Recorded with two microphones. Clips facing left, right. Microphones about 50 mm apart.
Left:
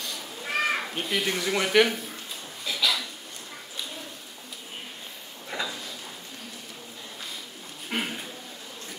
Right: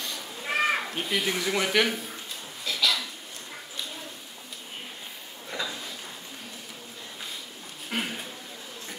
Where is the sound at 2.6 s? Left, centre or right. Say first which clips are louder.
Even; centre.